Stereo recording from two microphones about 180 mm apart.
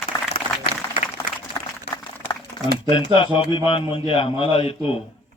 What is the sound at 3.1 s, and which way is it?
A man's voice, 25° left (ahead or behind).